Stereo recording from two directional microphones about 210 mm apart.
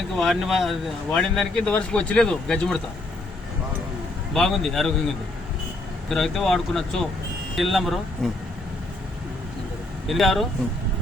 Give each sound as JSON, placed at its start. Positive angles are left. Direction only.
{"t": 0.2, "sound": "speech", "side_deg": 0}
{"t": 4.4, "sound": "speech", "side_deg": 0}
{"t": 6.1, "sound": "speech", "side_deg": 0}
{"t": 10.1, "sound": "speech", "side_deg": 0}